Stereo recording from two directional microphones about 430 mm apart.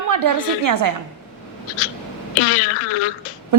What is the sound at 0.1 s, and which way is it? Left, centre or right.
Speech, right.